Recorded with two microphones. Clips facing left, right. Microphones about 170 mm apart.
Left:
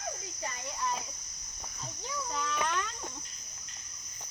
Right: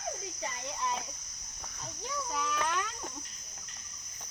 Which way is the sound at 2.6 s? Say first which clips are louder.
Even; 5° right (ahead or behind).